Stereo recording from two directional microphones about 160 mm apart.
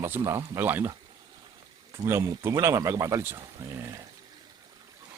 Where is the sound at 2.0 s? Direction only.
15° right (ahead or behind).